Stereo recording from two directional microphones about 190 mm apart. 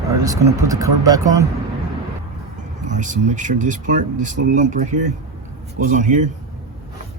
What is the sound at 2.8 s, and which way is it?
Speech, 40° right (ahead or behind).